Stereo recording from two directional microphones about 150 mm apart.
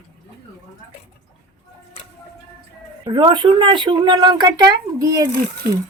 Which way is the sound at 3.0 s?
35° right (ahead or behind).